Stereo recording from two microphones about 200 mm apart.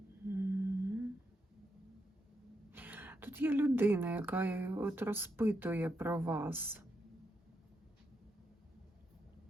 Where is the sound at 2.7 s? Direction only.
10° right (ahead or behind).